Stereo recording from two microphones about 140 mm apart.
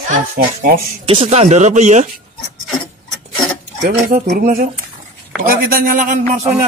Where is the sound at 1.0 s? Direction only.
50° right (ahead or behind).